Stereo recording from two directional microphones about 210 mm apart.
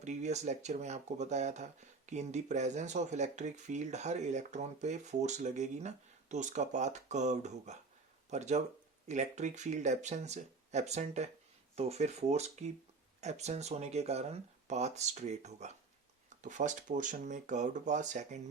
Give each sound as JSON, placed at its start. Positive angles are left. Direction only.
{"t": 0.0, "sound": "speech", "side_deg": -35}